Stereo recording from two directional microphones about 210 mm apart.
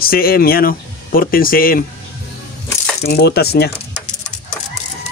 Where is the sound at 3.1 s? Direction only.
50° left (ahead or behind).